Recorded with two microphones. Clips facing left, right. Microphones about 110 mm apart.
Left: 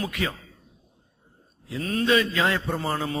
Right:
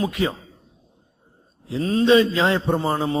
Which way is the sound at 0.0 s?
25° right (ahead or behind).